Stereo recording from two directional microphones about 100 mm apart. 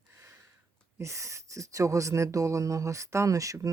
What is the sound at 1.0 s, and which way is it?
Speech, 30° right (ahead or behind).